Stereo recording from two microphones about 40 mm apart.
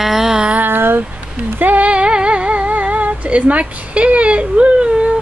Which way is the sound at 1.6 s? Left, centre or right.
Right.